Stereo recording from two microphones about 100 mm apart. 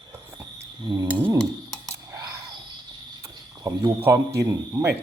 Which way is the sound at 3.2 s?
40° right (ahead or behind).